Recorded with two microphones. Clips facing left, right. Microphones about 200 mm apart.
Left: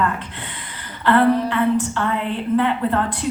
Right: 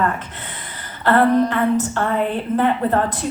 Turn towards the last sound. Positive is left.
turn(degrees=-40)  # may be behind; listen again after turning